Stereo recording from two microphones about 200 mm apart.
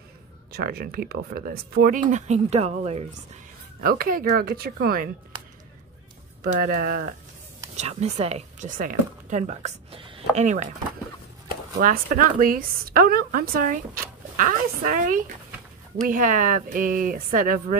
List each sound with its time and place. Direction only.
0.5 s speech: 50° right (ahead or behind); by 3.1 s 30° right (ahead or behind)
3.8 s speech: 45° right (ahead or behind)
6.5 s speech: 45° right (ahead or behind)
7.7 s speech: 35° right (ahead or behind)
11.7 s speech: 40° right (ahead or behind)